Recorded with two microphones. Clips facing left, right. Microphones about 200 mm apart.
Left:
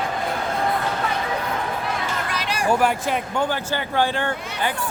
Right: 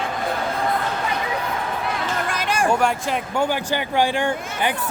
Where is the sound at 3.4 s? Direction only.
15° right (ahead or behind).